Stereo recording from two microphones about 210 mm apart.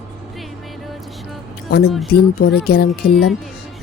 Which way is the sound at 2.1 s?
50° left (ahead or behind).